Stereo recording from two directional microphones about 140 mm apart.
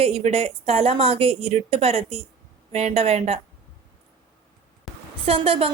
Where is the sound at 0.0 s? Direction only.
45° right (ahead or behind).